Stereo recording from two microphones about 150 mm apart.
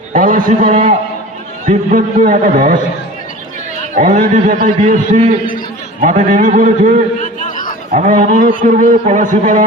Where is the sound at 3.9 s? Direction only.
60° right (ahead or behind).